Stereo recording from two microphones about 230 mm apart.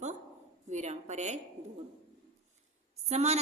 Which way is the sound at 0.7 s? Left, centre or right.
Right.